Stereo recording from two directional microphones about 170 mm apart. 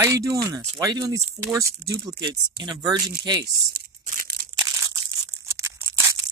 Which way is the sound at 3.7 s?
65° right (ahead or behind).